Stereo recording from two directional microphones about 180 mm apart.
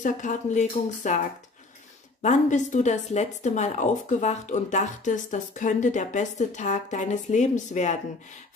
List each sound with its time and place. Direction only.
0.0 s speech: 45° left (ahead or behind)
2.2 s speech: 40° left (ahead or behind)